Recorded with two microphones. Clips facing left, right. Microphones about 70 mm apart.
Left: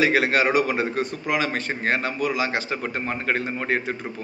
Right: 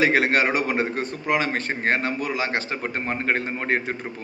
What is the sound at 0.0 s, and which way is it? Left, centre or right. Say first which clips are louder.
A man's voice: even; right.